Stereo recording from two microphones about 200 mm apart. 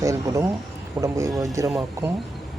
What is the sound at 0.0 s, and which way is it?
Speech, 15° right (ahead or behind).